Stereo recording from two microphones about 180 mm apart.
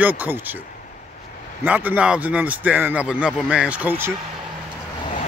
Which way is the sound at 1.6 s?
10° right (ahead or behind).